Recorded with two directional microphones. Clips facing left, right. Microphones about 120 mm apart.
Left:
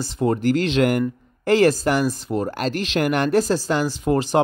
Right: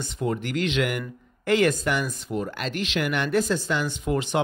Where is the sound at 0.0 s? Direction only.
35° left (ahead or behind).